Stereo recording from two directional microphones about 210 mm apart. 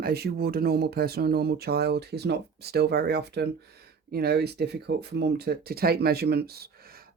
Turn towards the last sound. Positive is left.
turn(degrees=-45)  # may be behind; listen again after turning